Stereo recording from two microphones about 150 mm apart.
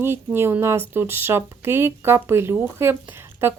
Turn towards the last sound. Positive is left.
turn(degrees=-15)  # may be behind; listen again after turning